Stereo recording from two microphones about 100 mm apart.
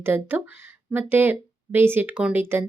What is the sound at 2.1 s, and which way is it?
Speech, 10° right (ahead or behind).